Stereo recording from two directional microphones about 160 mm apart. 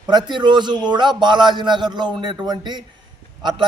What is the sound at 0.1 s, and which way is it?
A man's voice, 30° right (ahead or behind).